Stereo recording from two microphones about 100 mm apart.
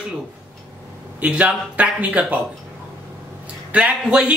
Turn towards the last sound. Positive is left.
turn(degrees=-10)  # may be behind; listen again after turning